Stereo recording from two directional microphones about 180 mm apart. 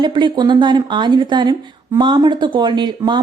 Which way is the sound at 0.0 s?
25° right (ahead or behind).